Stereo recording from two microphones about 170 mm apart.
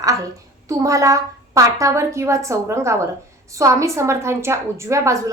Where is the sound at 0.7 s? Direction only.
20° right (ahead or behind).